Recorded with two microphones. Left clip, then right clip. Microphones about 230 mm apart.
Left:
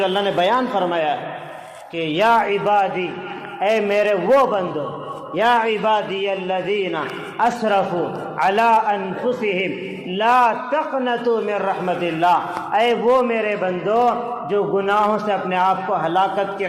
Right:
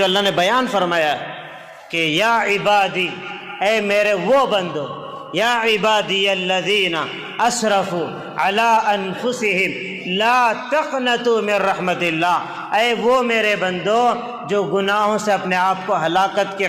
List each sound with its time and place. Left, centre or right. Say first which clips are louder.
0.0 s a man's voice: right 2 dB; right